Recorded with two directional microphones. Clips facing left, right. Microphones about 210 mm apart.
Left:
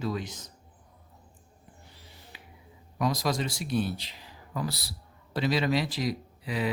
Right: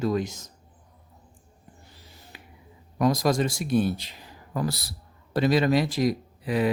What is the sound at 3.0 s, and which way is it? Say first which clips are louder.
Speech: right 6 dB; 50° right (ahead or behind).